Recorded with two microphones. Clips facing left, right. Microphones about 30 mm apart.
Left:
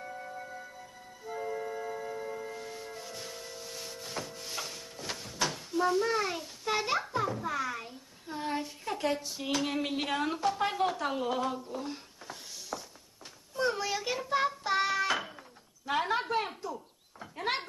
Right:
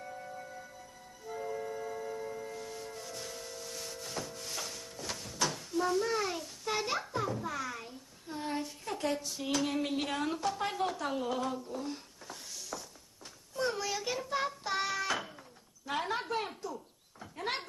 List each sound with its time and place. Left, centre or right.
0.0 s music: centre
13.6 s child singing: centre
15.8 s a sound: centre